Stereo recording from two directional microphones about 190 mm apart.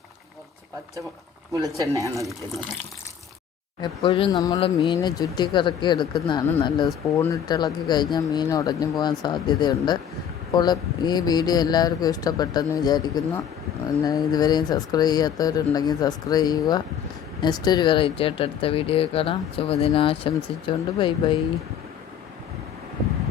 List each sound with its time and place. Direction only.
1.9 s speech: 15° right (ahead or behind)
3.8 s speech: 30° left (ahead or behind)